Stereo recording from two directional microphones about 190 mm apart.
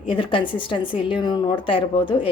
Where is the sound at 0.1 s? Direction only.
25° left (ahead or behind).